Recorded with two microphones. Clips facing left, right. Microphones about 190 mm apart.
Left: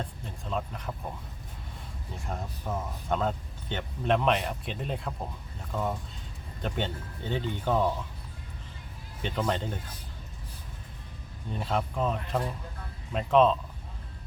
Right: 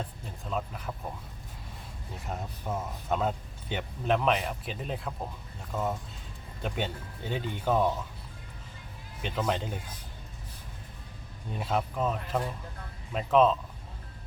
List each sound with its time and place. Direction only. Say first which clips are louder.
0.0 s speech: left 1 dB; 5° right (ahead or behind)
2.1 s speech: even; 5° right (ahead or behind)
9.2 s speech: left 1 dB; 5° right (ahead or behind)
11.5 s speech: even; 5° right (ahead or behind)